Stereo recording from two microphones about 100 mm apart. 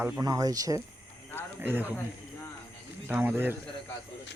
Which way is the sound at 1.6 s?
20° right (ahead or behind).